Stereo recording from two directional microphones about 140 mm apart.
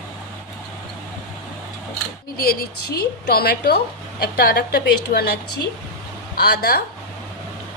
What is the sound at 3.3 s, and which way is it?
A woman's voice, 90° left.